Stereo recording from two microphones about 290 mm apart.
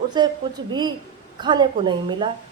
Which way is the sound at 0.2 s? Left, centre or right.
Centre.